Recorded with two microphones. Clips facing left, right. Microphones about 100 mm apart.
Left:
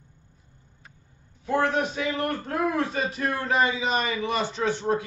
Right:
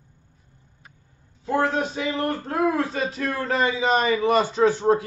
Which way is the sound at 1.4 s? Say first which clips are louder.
Right 1 dB; 30° right (ahead or behind).